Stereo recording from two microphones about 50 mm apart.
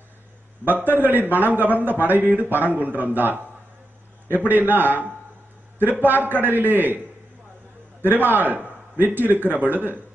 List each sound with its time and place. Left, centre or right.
0.7 s a man's voice: right
8.0 s a man's voice: right